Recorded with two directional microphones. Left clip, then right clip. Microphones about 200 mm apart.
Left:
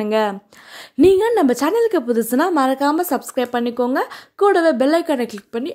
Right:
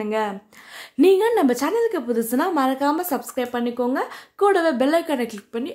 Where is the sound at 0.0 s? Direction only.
40° left (ahead or behind).